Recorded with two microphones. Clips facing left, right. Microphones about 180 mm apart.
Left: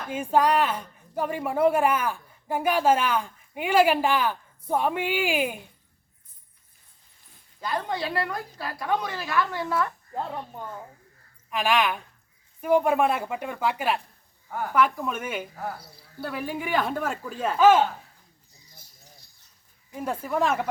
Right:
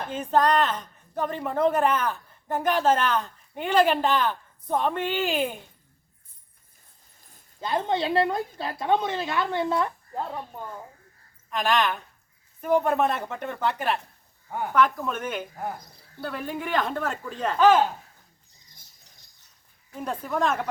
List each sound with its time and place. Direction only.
0.1 s speech: 10° left (ahead or behind)
7.6 s a woman's voice: 25° right (ahead or behind)
11.5 s speech: 10° left (ahead or behind)
15.5 s speech: 20° right (ahead or behind)
16.2 s a man's voice: 5° left (ahead or behind)
20.0 s speech: 5° left (ahead or behind)